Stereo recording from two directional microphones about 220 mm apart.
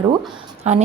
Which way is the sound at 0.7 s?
30° right (ahead or behind).